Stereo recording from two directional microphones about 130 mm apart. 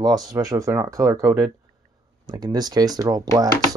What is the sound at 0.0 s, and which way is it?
Speech, 30° right (ahead or behind).